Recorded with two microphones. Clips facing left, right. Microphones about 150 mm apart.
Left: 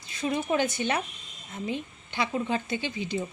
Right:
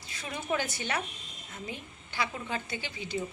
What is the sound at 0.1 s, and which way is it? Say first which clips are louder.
A woman's voice: left 6 dB; 20° left (ahead or behind).